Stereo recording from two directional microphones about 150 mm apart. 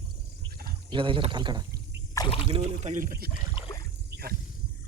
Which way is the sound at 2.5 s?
45° right (ahead or behind).